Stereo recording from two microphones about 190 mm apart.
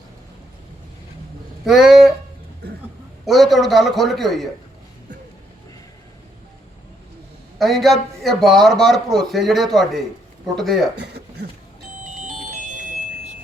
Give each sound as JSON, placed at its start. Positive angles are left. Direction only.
{"t": 1.6, "sound": "a man's voice", "side_deg": 0}
{"t": 3.2, "sound": "a man's voice", "side_deg": 0}
{"t": 7.6, "sound": "a man's voice", "side_deg": 0}
{"t": 10.9, "sound": "speech", "side_deg": -60}
{"t": 12.0, "sound": "music", "side_deg": -40}